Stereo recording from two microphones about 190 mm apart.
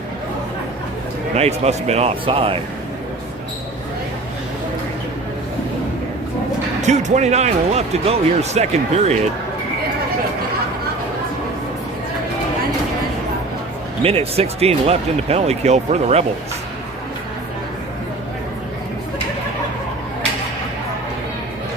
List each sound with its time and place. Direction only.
1.4 s speech: 35° right (ahead or behind)
6.8 s speech: 35° right (ahead or behind)
14.0 s speech: 30° right (ahead or behind)